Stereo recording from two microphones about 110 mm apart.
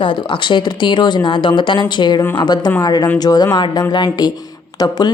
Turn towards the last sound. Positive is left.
turn(degrees=40)  # may be behind; listen again after turning